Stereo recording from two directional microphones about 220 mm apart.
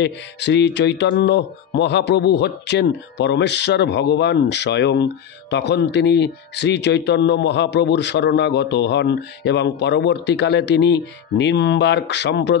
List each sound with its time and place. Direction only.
0.0 s speech: 50° left (ahead or behind)